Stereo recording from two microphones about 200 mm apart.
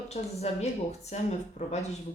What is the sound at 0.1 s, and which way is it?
Speech, 30° left (ahead or behind).